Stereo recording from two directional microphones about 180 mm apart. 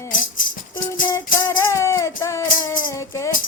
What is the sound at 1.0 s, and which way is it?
Music, 25° left (ahead or behind).